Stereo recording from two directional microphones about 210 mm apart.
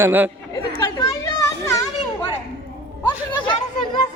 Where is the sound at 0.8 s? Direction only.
15° left (ahead or behind).